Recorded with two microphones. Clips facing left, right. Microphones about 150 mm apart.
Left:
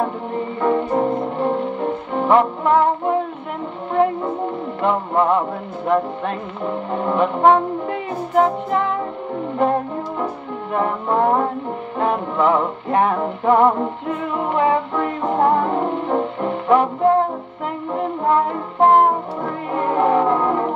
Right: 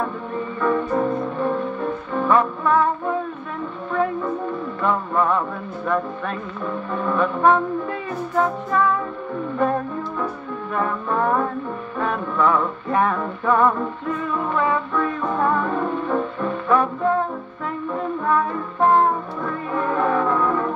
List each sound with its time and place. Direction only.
0.6 s music: 25° left (ahead or behind)